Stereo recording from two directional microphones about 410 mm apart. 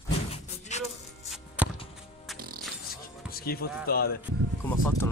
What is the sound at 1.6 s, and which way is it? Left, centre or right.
Music, centre.